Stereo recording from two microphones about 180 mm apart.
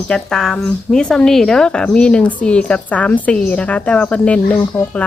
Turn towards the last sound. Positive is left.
turn(degrees=5)  # may be behind; listen again after turning